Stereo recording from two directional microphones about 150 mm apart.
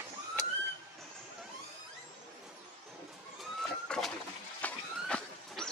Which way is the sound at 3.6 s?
5° left (ahead or behind).